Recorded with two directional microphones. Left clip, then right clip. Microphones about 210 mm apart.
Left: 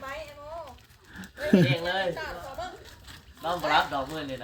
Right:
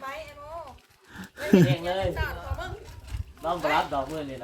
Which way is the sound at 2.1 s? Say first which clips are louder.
Right 1 dB; 55° right (ahead or behind).